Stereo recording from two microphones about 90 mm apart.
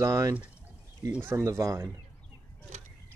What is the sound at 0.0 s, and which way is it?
Speech, 35° right (ahead or behind).